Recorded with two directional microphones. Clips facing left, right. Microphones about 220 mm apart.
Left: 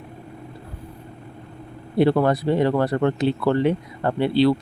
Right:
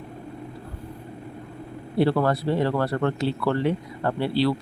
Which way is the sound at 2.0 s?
20° left (ahead or behind).